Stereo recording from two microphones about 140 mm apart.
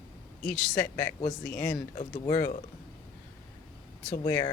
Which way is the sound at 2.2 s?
25° left (ahead or behind).